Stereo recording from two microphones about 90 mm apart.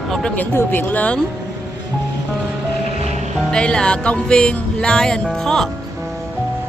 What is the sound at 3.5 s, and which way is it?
Music, 10° left (ahead or behind).